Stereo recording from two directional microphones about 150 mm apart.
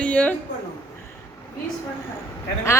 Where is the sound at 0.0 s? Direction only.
10° left (ahead or behind).